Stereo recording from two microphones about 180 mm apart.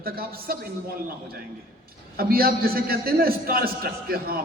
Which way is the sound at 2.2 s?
55° right (ahead or behind).